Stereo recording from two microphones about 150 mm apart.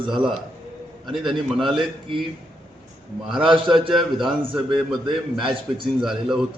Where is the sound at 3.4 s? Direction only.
35° right (ahead or behind).